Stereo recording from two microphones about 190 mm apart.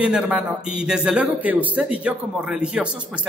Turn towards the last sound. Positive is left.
turn(degrees=-5)  # may be behind; listen again after turning